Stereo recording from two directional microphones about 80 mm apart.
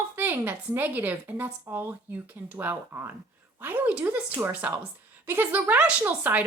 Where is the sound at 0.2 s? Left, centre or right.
Right.